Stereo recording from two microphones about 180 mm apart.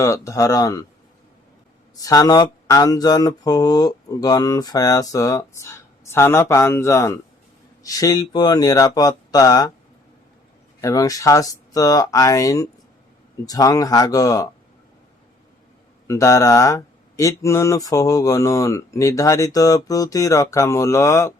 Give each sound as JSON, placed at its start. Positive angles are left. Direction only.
{"t": 0.0, "sound": "speech", "side_deg": 15}
{"t": 2.0, "sound": "speech", "side_deg": 20}
{"t": 10.8, "sound": "speech", "side_deg": 20}
{"t": 16.0, "sound": "speech", "side_deg": 15}